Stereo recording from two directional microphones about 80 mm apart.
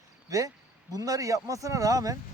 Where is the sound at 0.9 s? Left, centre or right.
Right.